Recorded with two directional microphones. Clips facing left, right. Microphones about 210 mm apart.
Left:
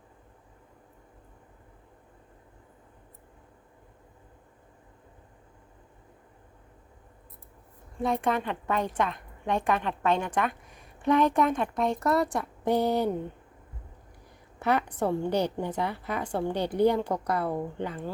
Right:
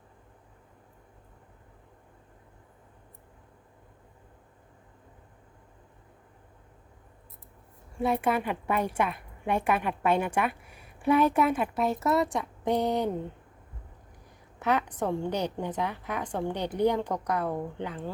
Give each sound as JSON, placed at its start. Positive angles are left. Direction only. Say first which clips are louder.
{"t": 7.9, "sound": "a woman's voice", "louder": "right 1 dB", "side_deg": -5}
{"t": 14.6, "sound": "a woman's voice", "louder": "left 1 dB", "side_deg": 10}